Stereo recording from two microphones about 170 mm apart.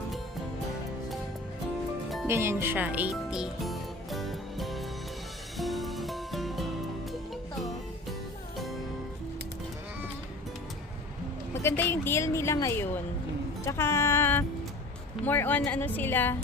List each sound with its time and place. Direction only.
2.2 s music: 15° right (ahead or behind)
11.5 s speech: 15° left (ahead or behind)